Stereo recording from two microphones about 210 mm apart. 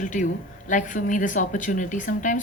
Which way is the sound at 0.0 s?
35° left (ahead or behind).